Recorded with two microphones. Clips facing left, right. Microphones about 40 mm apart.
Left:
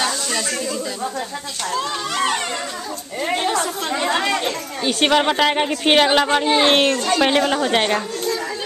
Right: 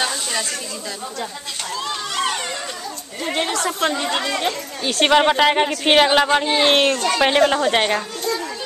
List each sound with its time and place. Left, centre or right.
0.0 s snake: centre
3.9 s speech: left
5.0 s a woman's voice: centre